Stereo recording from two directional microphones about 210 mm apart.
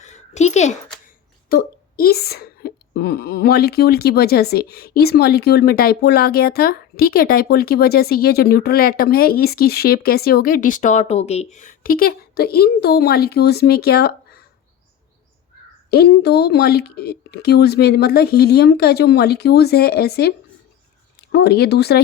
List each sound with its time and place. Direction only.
0.0 s a sound: 35° left (ahead or behind)
1.5 s a woman's voice: 45° left (ahead or behind)
15.9 s a woman's voice: 50° left (ahead or behind)
21.3 s a woman's voice: 50° left (ahead or behind)